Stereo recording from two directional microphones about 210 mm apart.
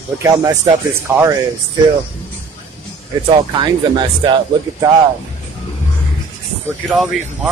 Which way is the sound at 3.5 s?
20° right (ahead or behind).